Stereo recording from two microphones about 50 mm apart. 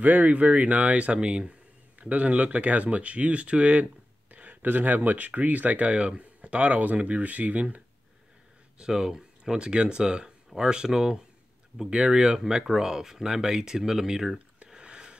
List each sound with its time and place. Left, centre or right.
0.0 s speech: right
8.7 s speech: centre
14.7 s a sound: centre